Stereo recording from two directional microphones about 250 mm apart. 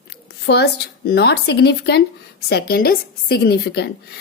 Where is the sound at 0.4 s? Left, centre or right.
Left.